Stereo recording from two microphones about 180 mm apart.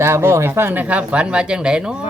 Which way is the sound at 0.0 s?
15° right (ahead or behind).